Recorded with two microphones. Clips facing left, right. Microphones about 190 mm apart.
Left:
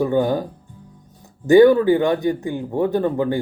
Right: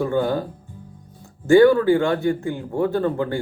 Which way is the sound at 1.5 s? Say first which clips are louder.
Left 2 dB; 20° left (ahead or behind).